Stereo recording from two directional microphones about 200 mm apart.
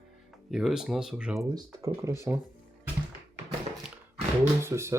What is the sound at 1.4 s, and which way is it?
Speech, 20° right (ahead or behind).